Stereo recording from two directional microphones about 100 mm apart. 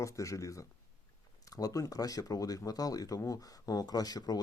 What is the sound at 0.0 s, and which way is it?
Speech, 30° left (ahead or behind).